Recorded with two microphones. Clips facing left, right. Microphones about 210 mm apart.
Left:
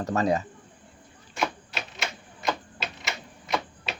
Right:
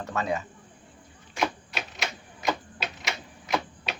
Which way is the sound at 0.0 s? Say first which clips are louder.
Left 5 dB; 40° left (ahead or behind).